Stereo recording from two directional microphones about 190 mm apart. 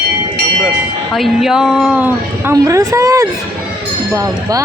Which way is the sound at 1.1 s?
Centre (ahead or behind).